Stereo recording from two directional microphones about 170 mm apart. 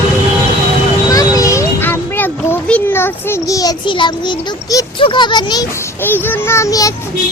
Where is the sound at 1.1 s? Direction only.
20° left (ahead or behind).